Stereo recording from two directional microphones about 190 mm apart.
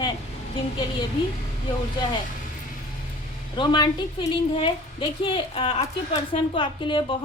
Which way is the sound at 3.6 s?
20° left (ahead or behind).